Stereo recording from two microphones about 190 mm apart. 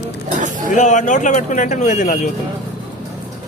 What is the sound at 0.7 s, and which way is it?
Speech, 40° left (ahead or behind).